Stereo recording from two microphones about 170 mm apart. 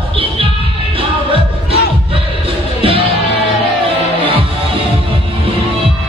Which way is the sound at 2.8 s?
35° right (ahead or behind).